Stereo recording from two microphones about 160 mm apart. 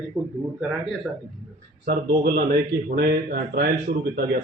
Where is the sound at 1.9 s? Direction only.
75° right (ahead or behind).